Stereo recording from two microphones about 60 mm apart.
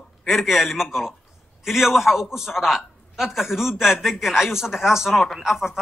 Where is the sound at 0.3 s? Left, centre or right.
Centre.